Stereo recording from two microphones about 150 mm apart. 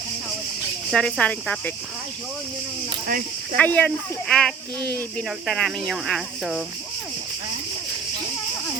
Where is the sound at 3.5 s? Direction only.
10° left (ahead or behind).